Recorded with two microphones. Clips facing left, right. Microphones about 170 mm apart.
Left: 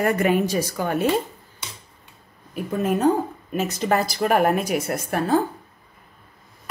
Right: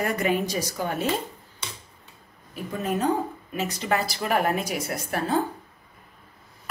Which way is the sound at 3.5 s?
45° left (ahead or behind).